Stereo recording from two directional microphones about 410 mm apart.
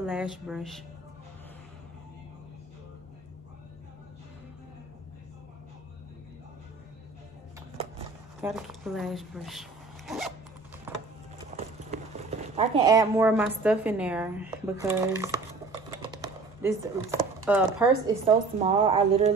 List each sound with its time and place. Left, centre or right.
0.0 s a woman's voice: centre
8.4 s speech: centre
10.9 s a sound: centre
11.9 s clip-clop: centre
12.4 s a woman's voice: centre